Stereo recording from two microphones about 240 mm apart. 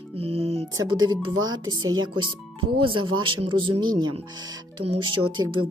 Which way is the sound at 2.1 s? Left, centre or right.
Centre.